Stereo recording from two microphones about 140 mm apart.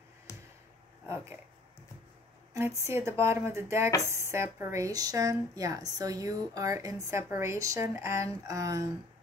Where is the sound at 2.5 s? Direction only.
20° right (ahead or behind).